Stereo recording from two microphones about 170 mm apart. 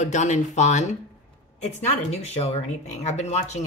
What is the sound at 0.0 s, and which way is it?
A woman's voice, 45° left (ahead or behind).